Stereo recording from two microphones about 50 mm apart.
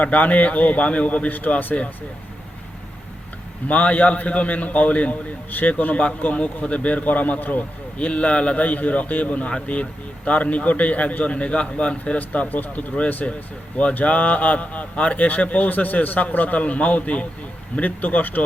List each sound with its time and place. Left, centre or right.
0.0 s a man's voice: left
3.7 s a man's voice: left